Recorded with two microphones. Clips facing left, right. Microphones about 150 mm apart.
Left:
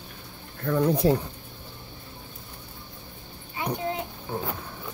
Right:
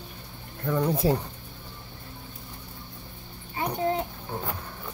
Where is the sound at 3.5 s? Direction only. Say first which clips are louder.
Right 3 dB; 40° right (ahead or behind).